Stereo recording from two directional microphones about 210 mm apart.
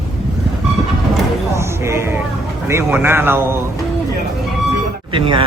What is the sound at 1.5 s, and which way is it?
Music, 15° right (ahead or behind).